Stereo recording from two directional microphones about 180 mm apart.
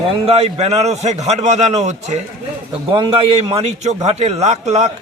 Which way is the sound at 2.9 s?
30° right (ahead or behind).